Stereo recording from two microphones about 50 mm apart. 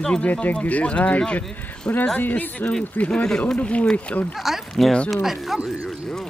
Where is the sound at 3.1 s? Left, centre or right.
Centre.